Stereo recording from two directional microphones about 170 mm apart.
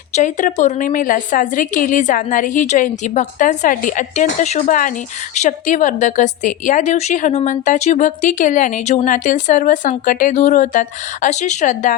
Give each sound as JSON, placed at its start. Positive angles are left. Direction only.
{"t": 0.1, "sound": "a woman's voice", "side_deg": 50}